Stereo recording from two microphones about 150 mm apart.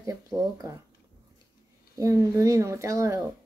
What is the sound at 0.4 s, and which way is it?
Speech, 20° right (ahead or behind).